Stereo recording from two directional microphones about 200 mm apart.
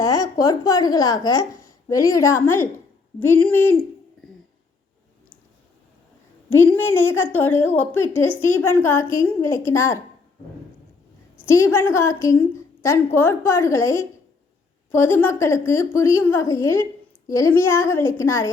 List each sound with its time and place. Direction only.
0.0 s a woman's voice: 15° left (ahead or behind)
6.8 s a woman's voice: 10° left (ahead or behind)
11.4 s a woman's voice: 15° left (ahead or behind)